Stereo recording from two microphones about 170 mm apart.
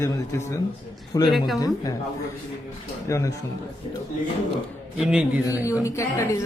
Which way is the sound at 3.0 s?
20° left (ahead or behind).